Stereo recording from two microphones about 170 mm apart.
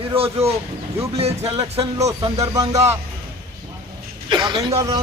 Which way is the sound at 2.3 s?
20° right (ahead or behind).